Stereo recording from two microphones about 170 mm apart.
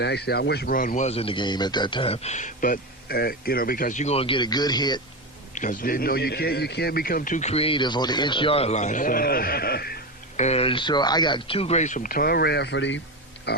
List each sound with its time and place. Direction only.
0.0 s speech: 75° left (ahead or behind); by 5.0 s 25° left (ahead or behind)
5.5 s a man's voice: 50° left (ahead or behind); by 10.0 s 65° left (ahead or behind)
10.3 s speech: 40° left (ahead or behind); by 13.0 s 90° left
13.5 s a sound: 75° left (ahead or behind)